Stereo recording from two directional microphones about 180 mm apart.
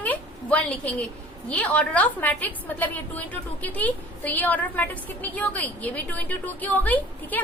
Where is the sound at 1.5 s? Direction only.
10° left (ahead or behind).